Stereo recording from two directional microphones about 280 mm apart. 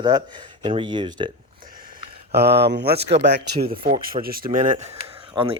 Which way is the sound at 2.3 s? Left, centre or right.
Right.